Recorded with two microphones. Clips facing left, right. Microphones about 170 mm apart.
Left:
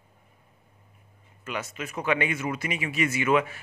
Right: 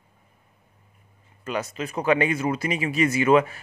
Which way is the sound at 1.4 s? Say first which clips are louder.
Right 5 dB; 35° right (ahead or behind).